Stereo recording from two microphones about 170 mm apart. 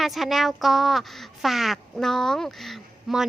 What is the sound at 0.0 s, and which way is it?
Speech, centre (ahead or behind).